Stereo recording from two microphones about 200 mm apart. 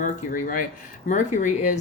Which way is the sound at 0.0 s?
40° left (ahead or behind).